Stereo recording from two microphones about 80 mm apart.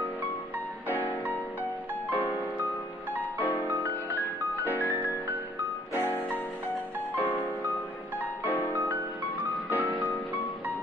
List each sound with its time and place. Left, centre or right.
2.0 s music: right
3.2 s music: left
6.0 s music: left
8.5 s music: left
9.4 s music: right